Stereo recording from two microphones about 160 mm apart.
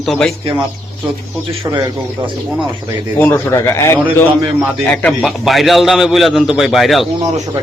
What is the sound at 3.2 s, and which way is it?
Speech, 10° left (ahead or behind).